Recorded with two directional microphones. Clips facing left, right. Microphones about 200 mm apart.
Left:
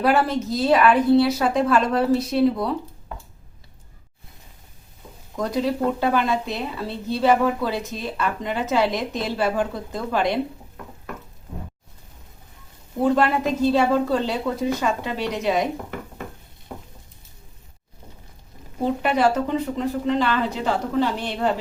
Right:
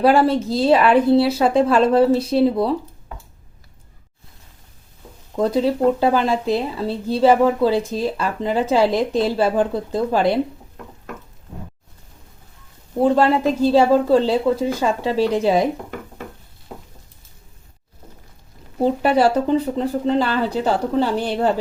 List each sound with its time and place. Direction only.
0.0 s speech: 30° right (ahead or behind)
5.4 s speech: 30° right (ahead or behind)
13.0 s speech: 30° right (ahead or behind)
19.0 s speech: 35° right (ahead or behind)